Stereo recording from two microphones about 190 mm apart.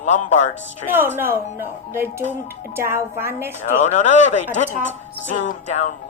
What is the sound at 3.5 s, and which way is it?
Speech, 40° left (ahead or behind).